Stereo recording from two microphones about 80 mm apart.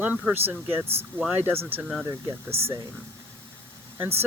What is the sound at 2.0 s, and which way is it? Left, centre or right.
Speech, right.